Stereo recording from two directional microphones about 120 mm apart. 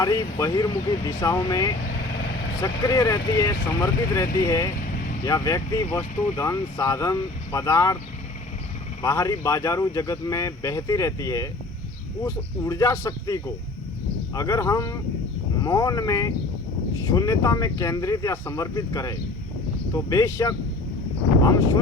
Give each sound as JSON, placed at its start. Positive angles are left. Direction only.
{"t": 0.0, "sound": "speech", "side_deg": 30}
{"t": 9.0, "sound": "speech", "side_deg": 30}